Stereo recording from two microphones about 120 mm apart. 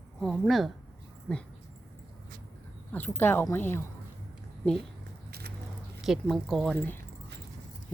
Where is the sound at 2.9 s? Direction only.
15° left (ahead or behind).